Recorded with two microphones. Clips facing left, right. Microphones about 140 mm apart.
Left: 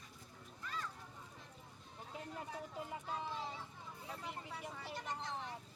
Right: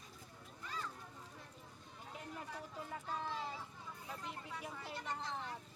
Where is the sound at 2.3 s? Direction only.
20° left (ahead or behind).